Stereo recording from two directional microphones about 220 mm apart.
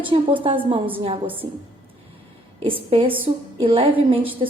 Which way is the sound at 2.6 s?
25° right (ahead or behind).